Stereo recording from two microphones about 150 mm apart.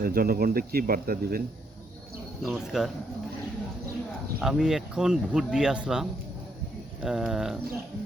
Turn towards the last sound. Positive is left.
turn(degrees=0)  # may be behind; listen again after turning